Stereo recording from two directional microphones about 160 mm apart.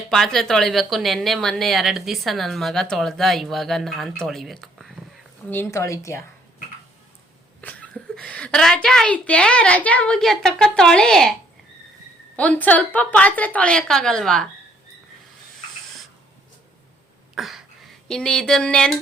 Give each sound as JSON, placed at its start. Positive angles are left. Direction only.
{"t": 0.1, "sound": "speech", "side_deg": 5}
{"t": 5.5, "sound": "a woman's voice", "side_deg": 15}
{"t": 7.6, "sound": "a woman's voice", "side_deg": 10}
{"t": 12.4, "sound": "a woman's voice", "side_deg": 10}
{"t": 17.3, "sound": "speech", "side_deg": 0}